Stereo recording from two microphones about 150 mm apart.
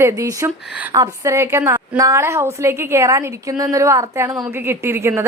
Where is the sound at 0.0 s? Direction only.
20° right (ahead or behind).